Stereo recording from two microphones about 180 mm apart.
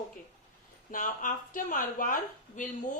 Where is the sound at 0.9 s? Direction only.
50° left (ahead or behind).